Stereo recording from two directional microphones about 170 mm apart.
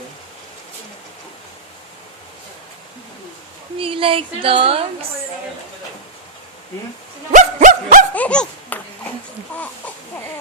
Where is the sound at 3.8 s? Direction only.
30° right (ahead or behind).